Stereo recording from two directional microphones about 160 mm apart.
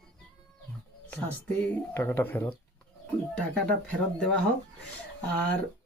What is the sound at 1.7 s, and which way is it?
Speech, 10° left (ahead or behind).